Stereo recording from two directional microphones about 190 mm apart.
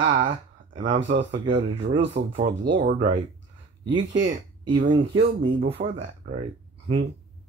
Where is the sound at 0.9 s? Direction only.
75° right (ahead or behind).